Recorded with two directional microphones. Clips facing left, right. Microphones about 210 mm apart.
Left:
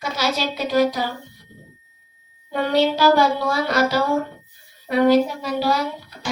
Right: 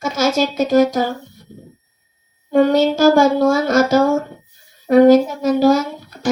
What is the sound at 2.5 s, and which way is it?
Speech, 45° right (ahead or behind).